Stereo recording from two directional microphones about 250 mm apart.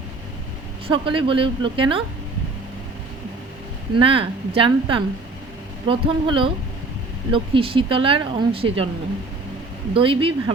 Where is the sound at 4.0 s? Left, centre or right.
Right.